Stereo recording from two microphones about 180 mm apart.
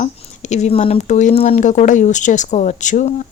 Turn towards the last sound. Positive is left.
turn(degrees=45)  # may be behind; listen again after turning